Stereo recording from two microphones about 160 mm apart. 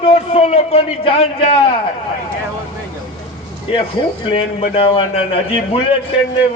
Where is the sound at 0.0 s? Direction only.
35° left (ahead or behind).